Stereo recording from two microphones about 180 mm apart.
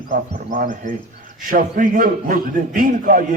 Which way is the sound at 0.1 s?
45° right (ahead or behind).